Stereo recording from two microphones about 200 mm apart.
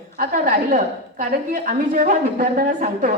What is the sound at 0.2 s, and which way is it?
A man's voice, 45° right (ahead or behind).